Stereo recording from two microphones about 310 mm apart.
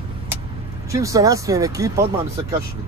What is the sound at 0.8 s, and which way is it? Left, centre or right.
Speech, centre.